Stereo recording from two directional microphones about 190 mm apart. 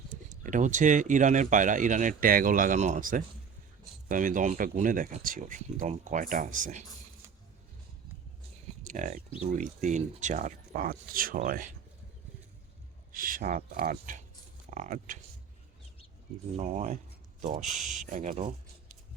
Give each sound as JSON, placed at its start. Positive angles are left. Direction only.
{"t": 0.1, "sound": "speech", "side_deg": -45}
{"t": 8.8, "sound": "speech", "side_deg": -40}
{"t": 13.1, "sound": "speech", "side_deg": -45}
{"t": 16.6, "sound": "speech", "side_deg": -40}